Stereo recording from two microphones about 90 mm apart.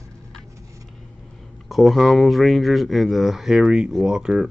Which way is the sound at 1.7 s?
Centre (ahead or behind).